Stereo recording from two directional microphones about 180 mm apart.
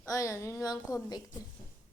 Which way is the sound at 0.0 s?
20° left (ahead or behind).